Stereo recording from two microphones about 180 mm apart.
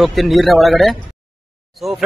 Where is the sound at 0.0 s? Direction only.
Centre (ahead or behind).